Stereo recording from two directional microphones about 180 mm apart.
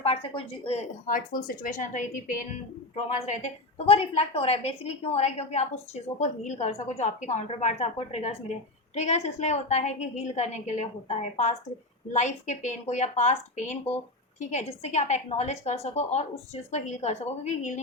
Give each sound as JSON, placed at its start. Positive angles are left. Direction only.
{"t": 0.0, "sound": "a woman's voice", "side_deg": 30}
{"t": 1.0, "sound": "a woman's voice", "side_deg": 50}